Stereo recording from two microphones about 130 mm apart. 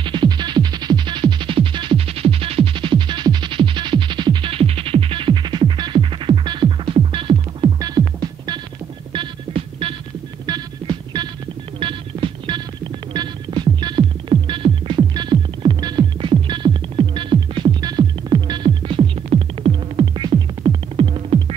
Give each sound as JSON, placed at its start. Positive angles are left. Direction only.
{"t": 0.0, "sound": "music", "side_deg": -35}
{"t": 9.1, "sound": "music", "side_deg": -40}